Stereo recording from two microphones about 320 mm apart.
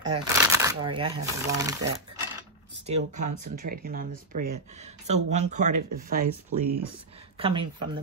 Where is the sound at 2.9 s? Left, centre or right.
Right.